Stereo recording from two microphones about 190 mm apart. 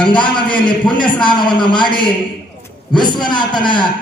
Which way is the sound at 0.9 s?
25° left (ahead or behind).